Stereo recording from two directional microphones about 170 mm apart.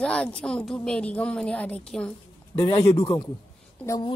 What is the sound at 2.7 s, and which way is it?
Speech, 30° left (ahead or behind).